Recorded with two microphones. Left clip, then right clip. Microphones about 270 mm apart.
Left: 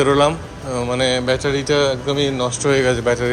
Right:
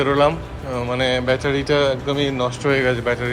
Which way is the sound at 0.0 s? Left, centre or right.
Centre.